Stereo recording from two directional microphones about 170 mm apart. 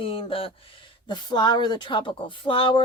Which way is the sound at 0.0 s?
35° left (ahead or behind).